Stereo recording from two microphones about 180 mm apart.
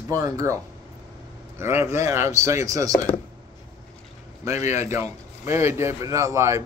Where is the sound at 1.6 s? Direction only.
15° right (ahead or behind).